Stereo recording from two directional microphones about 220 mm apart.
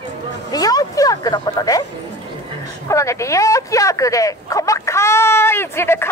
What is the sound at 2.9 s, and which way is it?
Speech, 15° left (ahead or behind).